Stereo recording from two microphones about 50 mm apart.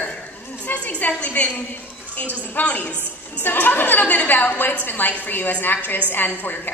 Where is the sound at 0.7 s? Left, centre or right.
Left.